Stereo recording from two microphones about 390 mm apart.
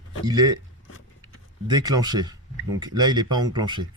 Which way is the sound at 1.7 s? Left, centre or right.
Centre.